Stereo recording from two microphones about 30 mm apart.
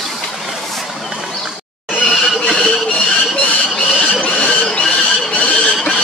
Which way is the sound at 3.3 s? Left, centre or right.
Left.